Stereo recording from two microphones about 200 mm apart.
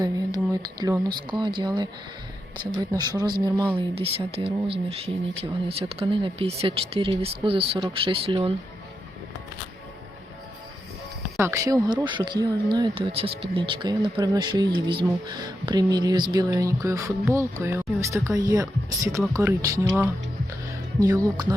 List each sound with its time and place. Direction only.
0.5 s speech: 20° right (ahead or behind)
2.9 s speech: 20° right (ahead or behind)
11.3 s speech: 15° right (ahead or behind)
20.7 s music: 15° right (ahead or behind)